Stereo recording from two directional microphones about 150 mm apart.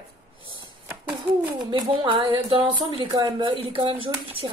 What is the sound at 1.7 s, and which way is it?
A woman's voice, 35° right (ahead or behind).